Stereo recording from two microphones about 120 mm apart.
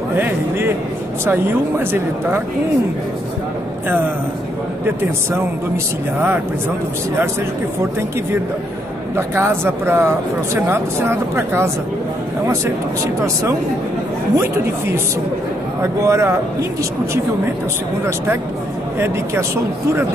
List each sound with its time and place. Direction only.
1.2 s speech: 20° right (ahead or behind)
9.1 s speech: 20° right (ahead or behind)
18.9 s speech: 20° right (ahead or behind)